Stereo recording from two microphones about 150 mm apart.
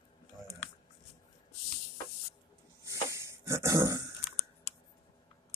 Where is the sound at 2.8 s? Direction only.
20° right (ahead or behind).